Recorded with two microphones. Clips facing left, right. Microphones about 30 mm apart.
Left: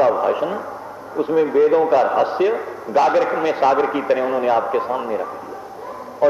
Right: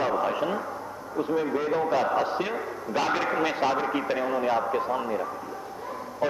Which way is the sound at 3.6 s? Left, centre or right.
Left.